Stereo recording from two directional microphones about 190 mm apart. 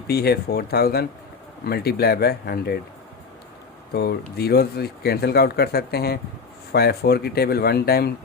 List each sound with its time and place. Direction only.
0.1 s speech: 55° left (ahead or behind)
3.9 s speech: 55° left (ahead or behind)